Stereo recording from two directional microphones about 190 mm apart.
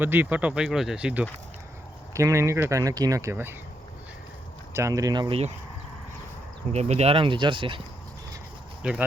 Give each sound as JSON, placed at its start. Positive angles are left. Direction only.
{"t": 0.0, "sound": "speech", "side_deg": -10}
{"t": 4.7, "sound": "speech", "side_deg": -15}
{"t": 6.7, "sound": "speech", "side_deg": -35}
{"t": 8.8, "sound": "speech", "side_deg": -5}